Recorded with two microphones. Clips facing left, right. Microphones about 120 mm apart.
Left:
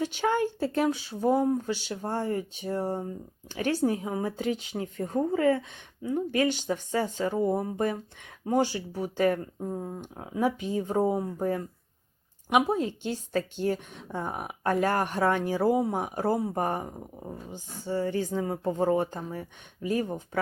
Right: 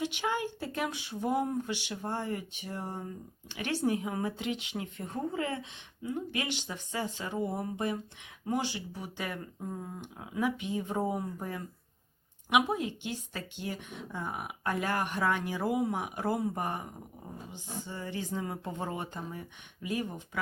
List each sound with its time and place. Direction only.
0.0 s speech: 45° left (ahead or behind)
1.5 s speech: 30° left (ahead or behind)